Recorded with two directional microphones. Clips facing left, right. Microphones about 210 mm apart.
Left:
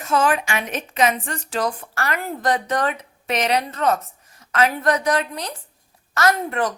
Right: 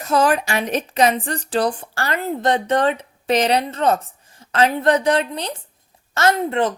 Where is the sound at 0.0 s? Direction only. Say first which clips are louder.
Right 2 dB; 35° right (ahead or behind).